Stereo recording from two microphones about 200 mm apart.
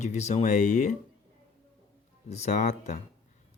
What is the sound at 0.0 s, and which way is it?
Speech, 35° left (ahead or behind).